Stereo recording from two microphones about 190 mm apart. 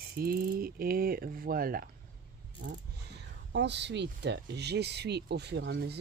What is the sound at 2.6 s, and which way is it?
Speech, 65° right (ahead or behind).